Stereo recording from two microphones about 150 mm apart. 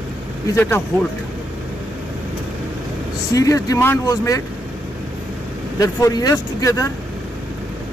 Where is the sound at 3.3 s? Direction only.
25° left (ahead or behind).